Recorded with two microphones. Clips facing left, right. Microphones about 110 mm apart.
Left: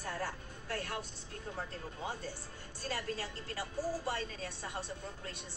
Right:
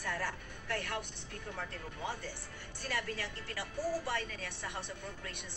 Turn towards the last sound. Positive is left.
turn(degrees=35)  # may be behind; listen again after turning